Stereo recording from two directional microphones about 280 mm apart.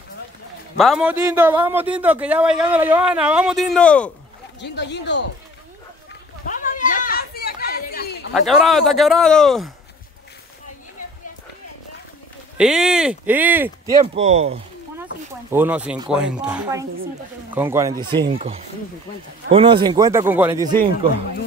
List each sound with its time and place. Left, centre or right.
0.7 s a man's voice: centre
4.6 s speech: left
6.4 s a sound: left
8.3 s a man's voice: centre
12.5 s speech: centre; by 14.6 s right
15.5 s a man's voice: centre